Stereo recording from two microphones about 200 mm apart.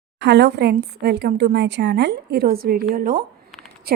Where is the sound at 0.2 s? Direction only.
60° right (ahead or behind).